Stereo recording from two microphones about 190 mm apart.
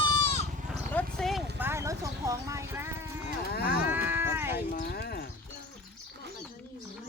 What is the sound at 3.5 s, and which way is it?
Moo, 55° left (ahead or behind).